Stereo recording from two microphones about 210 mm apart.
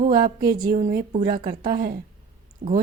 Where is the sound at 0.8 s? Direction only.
35° right (ahead or behind).